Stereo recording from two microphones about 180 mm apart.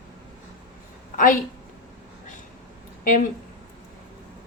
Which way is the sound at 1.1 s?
50° left (ahead or behind).